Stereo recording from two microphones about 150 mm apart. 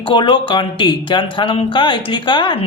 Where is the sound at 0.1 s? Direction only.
35° left (ahead or behind).